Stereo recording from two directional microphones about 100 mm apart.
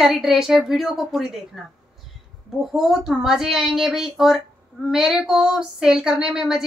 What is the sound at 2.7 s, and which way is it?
A woman's voice, 5° right (ahead or behind).